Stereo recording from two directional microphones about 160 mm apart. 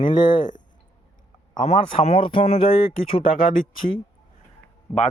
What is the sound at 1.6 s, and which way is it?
Speech, 45° left (ahead or behind).